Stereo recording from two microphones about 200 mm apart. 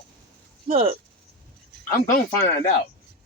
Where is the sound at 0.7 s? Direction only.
30° right (ahead or behind).